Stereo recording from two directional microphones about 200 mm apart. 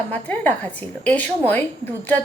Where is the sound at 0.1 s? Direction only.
10° left (ahead or behind).